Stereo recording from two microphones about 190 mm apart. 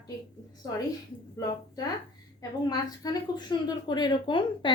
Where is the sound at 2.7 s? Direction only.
20° left (ahead or behind).